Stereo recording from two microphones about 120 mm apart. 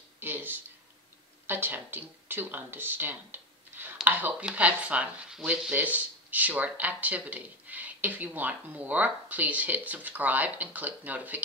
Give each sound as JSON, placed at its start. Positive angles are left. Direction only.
{"t": 0.2, "sound": "speech", "side_deg": -15}